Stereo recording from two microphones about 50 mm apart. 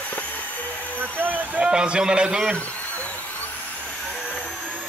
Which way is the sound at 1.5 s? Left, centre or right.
Right.